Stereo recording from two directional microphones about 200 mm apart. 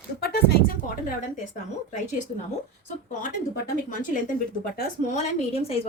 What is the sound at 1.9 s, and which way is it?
Speech, 35° left (ahead or behind).